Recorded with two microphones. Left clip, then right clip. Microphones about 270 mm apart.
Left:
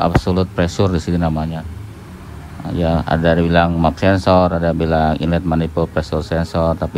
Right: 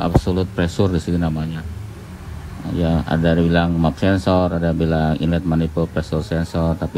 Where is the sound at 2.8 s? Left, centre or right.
Right.